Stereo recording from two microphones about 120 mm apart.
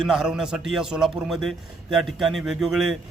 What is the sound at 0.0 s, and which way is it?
A man's voice, 5° right (ahead or behind).